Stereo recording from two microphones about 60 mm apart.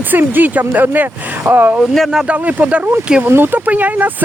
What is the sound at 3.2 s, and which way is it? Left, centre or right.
Speech, right.